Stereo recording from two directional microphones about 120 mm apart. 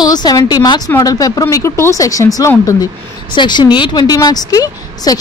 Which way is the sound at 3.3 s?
40° left (ahead or behind).